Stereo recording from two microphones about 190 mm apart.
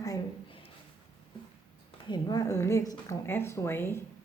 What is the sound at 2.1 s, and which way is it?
A woman's voice, 20° left (ahead or behind).